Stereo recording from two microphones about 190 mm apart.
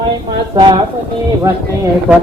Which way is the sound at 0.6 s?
25° right (ahead or behind).